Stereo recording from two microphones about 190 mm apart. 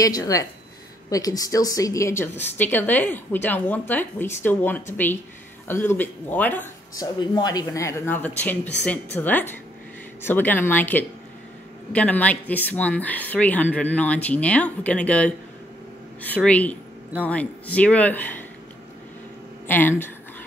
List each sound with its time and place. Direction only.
0.0 s a woman's voice: 20° left (ahead or behind)
7.0 s a woman's voice: 20° left (ahead or behind)
19.7 s a woman's voice: 10° left (ahead or behind)